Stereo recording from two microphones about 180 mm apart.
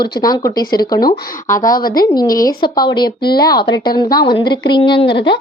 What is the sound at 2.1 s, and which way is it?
A woman's voice, 20° left (ahead or behind).